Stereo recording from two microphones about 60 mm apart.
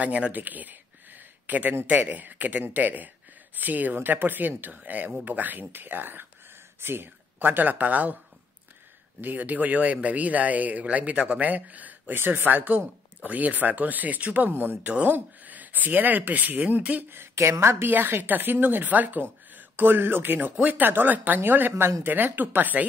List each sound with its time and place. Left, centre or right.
0.0 s speech: right
9.2 s speech: right
14.5 s speech: right
14.8 s speech: right
17.1 s a woman's voice: right
17.8 s speech: right
20.3 s speech: right